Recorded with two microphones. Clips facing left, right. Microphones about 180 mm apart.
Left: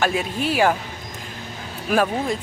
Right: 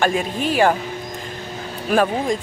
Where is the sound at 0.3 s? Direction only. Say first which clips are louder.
Right 2 dB; 45° right (ahead or behind).